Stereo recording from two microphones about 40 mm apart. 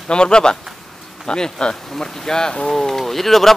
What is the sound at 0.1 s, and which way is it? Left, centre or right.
Speech, left.